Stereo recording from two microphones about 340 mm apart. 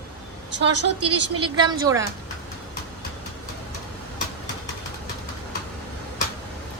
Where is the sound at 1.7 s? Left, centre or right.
Centre.